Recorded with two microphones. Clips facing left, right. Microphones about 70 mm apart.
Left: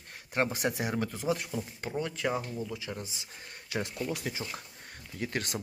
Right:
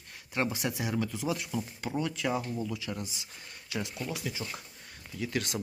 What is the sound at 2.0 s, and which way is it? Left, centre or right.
Speech, left.